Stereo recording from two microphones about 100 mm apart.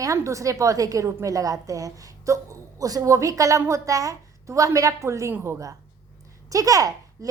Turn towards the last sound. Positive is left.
turn(degrees=-35)  # may be behind; listen again after turning